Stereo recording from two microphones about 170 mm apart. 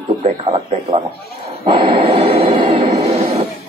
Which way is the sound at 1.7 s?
30° right (ahead or behind).